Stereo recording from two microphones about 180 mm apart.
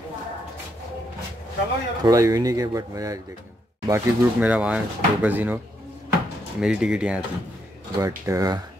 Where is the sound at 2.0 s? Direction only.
20° right (ahead or behind).